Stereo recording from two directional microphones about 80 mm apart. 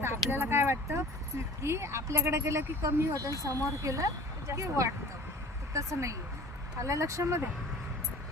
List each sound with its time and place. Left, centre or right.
0.0 s a sound: right
1.6 s speech: right
2.8 s a woman's voice: right